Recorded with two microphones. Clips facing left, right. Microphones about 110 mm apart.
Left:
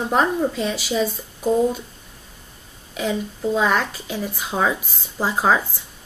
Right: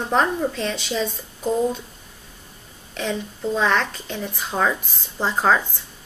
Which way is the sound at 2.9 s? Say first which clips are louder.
Left 2 dB; 5° left (ahead or behind).